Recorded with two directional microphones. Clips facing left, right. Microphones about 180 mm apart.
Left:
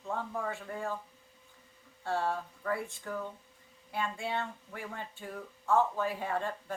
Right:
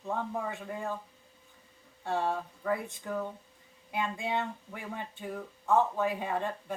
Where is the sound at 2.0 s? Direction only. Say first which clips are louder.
Right 1 dB; 15° right (ahead or behind).